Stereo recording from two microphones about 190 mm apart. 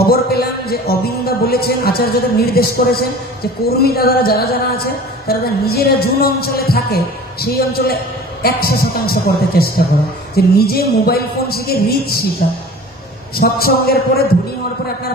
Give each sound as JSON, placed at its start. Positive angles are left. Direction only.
{"t": 0.0, "sound": "a woman's voice", "side_deg": 55}
{"t": 13.4, "sound": "a woman's voice", "side_deg": 55}